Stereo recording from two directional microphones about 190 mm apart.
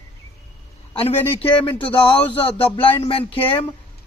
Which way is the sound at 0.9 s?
30° left (ahead or behind).